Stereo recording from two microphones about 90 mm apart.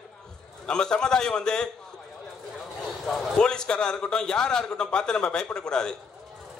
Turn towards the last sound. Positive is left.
turn(degrees=10)  # may be behind; listen again after turning